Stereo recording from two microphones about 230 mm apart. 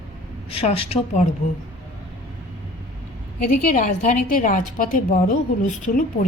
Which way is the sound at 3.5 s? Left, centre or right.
Left.